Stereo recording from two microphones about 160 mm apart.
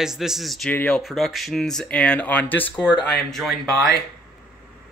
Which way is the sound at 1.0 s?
Centre (ahead or behind).